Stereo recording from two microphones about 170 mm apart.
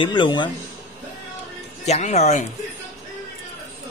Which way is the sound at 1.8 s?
40° left (ahead or behind).